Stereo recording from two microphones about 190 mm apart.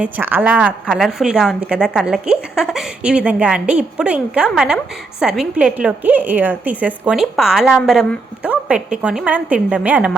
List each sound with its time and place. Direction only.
0.0 s a woman's voice: 10° right (ahead or behind)